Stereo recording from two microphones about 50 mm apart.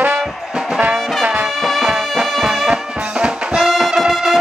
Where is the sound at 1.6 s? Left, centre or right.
Centre.